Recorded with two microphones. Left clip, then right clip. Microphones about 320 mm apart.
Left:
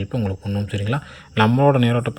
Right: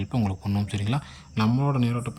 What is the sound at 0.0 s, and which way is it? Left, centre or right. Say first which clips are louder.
Speech: left 4 dB; centre.